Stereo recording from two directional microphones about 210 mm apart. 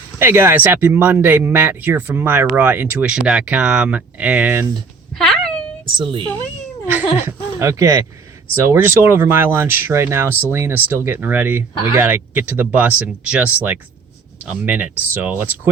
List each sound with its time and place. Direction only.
0.2 s speech: 10° right (ahead or behind)
5.1 s a sound: 5° left (ahead or behind)
5.8 s a woman's voice: 25° right (ahead or behind)
7.3 s speech: 15° right (ahead or behind)